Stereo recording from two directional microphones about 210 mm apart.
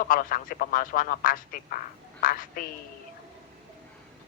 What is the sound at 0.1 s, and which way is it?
Speech, 45° left (ahead or behind).